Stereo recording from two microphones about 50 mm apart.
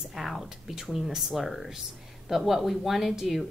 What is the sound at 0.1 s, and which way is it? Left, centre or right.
A woman's voice, centre.